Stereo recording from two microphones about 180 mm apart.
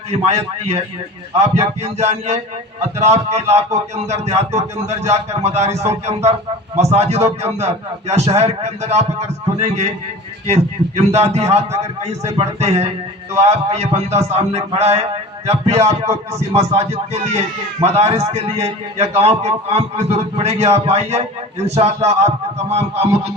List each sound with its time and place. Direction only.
0.1 s a man's voice: 35° right (ahead or behind)